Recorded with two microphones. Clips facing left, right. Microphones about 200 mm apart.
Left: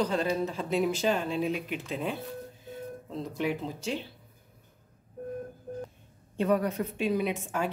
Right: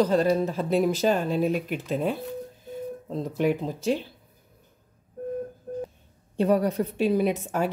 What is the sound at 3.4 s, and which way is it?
Speech, 50° right (ahead or behind).